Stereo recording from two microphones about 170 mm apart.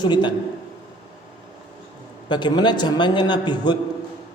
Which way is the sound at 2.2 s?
25° left (ahead or behind).